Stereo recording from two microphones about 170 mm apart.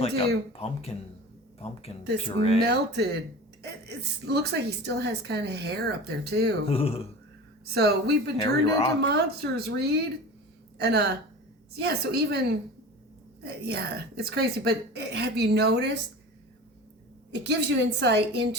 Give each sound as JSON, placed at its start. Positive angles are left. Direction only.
{"t": 0.5, "sound": "speech", "side_deg": 35}
{"t": 2.6, "sound": "a woman's voice", "side_deg": -75}
{"t": 6.7, "sound": "speech", "side_deg": 35}
{"t": 7.6, "sound": "a woman's voice", "side_deg": -70}
{"t": 8.4, "sound": "a man's voice", "side_deg": 25}
{"t": 9.0, "sound": "a woman's voice", "side_deg": -70}
{"t": 13.4, "sound": "a woman's voice", "side_deg": -75}
{"t": 17.3, "sound": "a woman's voice", "side_deg": -90}